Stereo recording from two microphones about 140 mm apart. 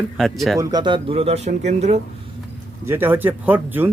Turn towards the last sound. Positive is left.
turn(degrees=-15)  # may be behind; listen again after turning